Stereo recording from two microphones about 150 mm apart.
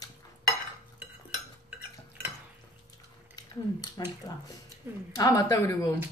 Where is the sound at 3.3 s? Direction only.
25° left (ahead or behind).